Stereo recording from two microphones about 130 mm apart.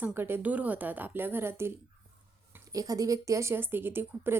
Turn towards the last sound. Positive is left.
turn(degrees=-15)  # may be behind; listen again after turning